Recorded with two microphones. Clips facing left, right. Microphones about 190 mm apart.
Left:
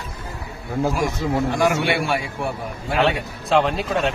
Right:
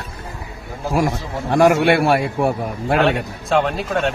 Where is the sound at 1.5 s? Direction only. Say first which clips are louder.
Right 11 dB; 60° right (ahead or behind).